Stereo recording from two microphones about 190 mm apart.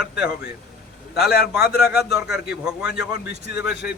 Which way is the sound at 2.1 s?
5° right (ahead or behind).